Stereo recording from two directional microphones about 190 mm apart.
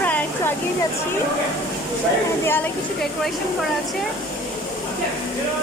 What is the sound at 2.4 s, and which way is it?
Speech, 10° left (ahead or behind).